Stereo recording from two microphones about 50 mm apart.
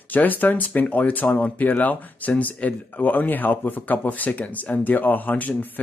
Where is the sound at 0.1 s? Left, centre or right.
Left.